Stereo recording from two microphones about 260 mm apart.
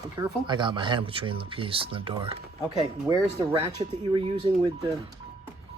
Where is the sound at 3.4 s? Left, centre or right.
Centre.